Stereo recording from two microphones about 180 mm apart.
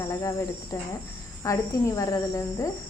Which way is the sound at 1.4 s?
20° left (ahead or behind).